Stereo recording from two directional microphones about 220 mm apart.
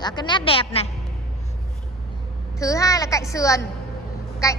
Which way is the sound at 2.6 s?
15° left (ahead or behind).